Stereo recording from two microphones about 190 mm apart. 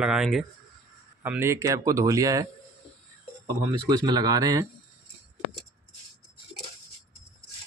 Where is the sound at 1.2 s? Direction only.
10° right (ahead or behind).